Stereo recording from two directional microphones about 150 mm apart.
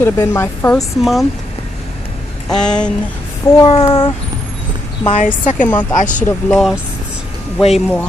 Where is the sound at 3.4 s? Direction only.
25° left (ahead or behind).